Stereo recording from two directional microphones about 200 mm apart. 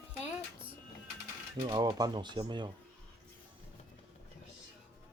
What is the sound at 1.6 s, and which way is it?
Speech, 20° right (ahead or behind).